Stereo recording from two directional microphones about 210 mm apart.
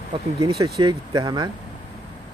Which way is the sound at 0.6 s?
20° right (ahead or behind).